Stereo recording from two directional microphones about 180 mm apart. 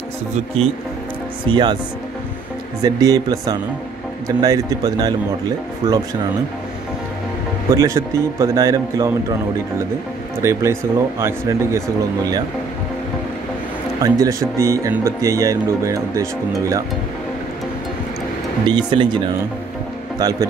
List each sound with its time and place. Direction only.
1.5 s speech: 25° right (ahead or behind)
2.8 s speech: 20° right (ahead or behind)
7.7 s speech: 15° right (ahead or behind)
10.4 s speech: 15° right (ahead or behind)
14.0 s speech: 20° right (ahead or behind)
18.7 s a man's voice: 25° right (ahead or behind)